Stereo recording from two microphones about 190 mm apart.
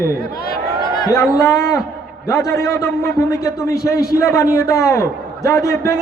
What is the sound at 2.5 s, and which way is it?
A man's voice, 15° left (ahead or behind).